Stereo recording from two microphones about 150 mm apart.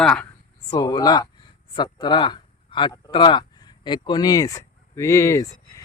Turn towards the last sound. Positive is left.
turn(degrees=20)  # may be behind; listen again after turning